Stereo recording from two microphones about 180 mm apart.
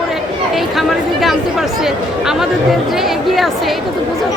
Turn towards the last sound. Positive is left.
turn(degrees=0)  # may be behind; listen again after turning